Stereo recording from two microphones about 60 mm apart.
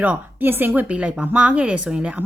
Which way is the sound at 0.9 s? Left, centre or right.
Centre.